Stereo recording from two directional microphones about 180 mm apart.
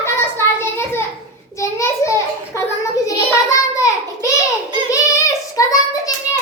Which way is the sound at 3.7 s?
20° left (ahead or behind).